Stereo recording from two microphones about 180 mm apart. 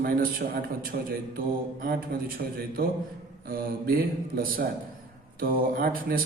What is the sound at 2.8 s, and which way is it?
A man's voice, 50° right (ahead or behind).